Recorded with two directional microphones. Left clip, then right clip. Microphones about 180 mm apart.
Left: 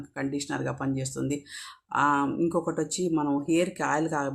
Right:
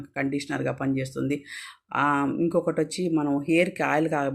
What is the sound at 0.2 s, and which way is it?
Speech, 10° right (ahead or behind).